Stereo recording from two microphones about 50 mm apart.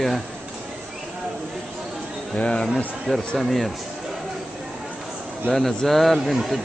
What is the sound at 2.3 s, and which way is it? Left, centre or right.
Speech, centre.